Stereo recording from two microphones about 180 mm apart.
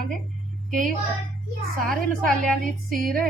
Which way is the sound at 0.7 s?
Centre (ahead or behind).